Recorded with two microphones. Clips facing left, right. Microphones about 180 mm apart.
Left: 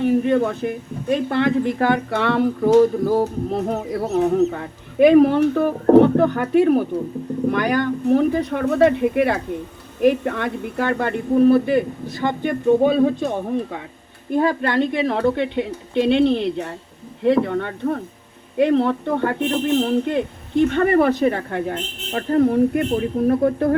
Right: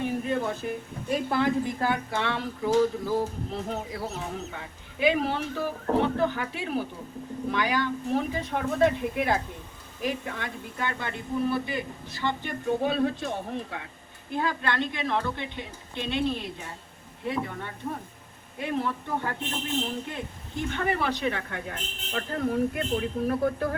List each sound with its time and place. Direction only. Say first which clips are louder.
0.0 s speech: left 10 dB; 70° left (ahead or behind); by 23.6 s 35° left (ahead or behind)